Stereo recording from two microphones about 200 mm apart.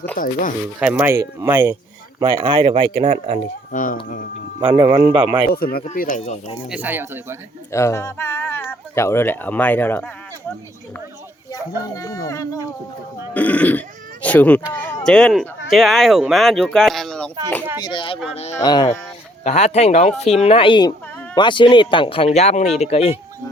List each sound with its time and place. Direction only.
0.2 s speech: 40° left (ahead or behind)
0.8 s speech: 10° right (ahead or behind)
2.1 s speech: 25° right (ahead or behind)
3.7 s speech: 40° left (ahead or behind)
4.6 s speech: 20° right (ahead or behind)
5.5 s speech: 50° left (ahead or behind)
6.7 s speech: 10° right (ahead or behind)
7.7 s speech: 15° left (ahead or behind)
11.9 s speech: 20° left (ahead or behind)
13.3 s speech: 5° left (ahead or behind)
17.8 s speech: 25° left (ahead or behind)
18.5 s speech: 20° left (ahead or behind)
19.5 s speech: 35° left (ahead or behind)